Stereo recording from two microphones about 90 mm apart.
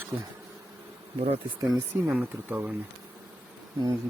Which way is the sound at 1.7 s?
20° right (ahead or behind).